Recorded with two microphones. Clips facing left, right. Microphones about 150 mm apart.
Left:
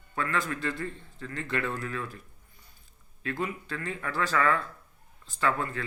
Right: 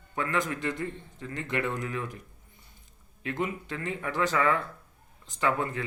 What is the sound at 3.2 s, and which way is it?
Speech, 20° right (ahead or behind).